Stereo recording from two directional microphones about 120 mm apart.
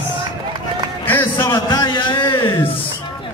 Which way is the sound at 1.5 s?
40° left (ahead or behind).